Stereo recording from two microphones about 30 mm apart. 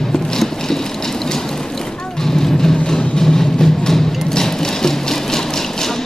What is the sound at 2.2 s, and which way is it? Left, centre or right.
Music, centre.